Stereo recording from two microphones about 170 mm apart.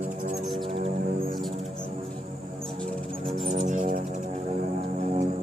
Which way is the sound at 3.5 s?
45° right (ahead or behind).